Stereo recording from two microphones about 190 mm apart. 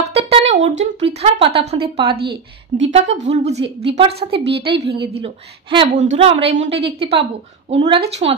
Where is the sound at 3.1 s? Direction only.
70° right (ahead or behind).